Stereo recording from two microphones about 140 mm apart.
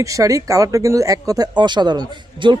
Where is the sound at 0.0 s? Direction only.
25° right (ahead or behind).